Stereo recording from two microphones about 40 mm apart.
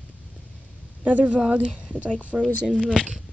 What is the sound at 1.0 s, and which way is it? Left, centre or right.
A woman's voice, right.